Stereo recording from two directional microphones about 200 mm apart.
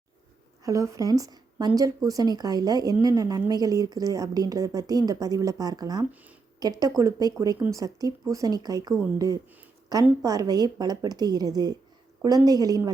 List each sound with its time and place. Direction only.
0.6 s a woman's voice: 15° right (ahead or behind)